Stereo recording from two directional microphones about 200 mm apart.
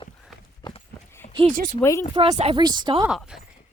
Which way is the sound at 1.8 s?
10° left (ahead or behind).